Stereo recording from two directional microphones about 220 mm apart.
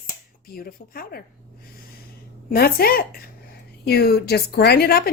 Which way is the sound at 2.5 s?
45° left (ahead or behind).